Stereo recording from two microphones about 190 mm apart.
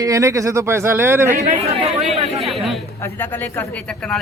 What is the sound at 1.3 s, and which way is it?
Speech, 35° right (ahead or behind).